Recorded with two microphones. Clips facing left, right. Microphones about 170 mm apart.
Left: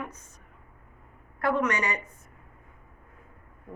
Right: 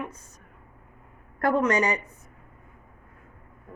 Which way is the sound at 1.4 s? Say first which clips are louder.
Right 4 dB; 40° right (ahead or behind).